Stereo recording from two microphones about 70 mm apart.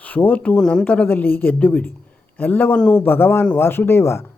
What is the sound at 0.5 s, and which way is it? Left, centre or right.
Speech, centre.